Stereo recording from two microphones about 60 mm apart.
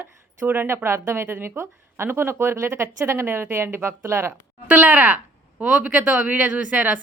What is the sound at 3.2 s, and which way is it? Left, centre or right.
A woman's voice, right.